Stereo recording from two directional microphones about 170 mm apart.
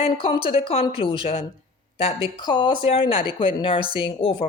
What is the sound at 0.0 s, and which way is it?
A woman's voice, 30° left (ahead or behind).